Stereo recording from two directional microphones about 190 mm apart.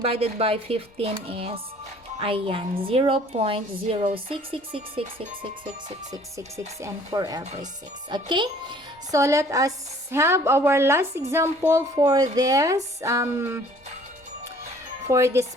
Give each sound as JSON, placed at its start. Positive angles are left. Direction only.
{"t": 0.0, "sound": "a woman's voice", "side_deg": -30}
{"t": 6.8, "sound": "a woman's voice", "side_deg": -20}
{"t": 15.0, "sound": "a woman's voice", "side_deg": -15}